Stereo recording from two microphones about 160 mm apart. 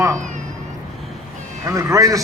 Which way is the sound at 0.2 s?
50° right (ahead or behind).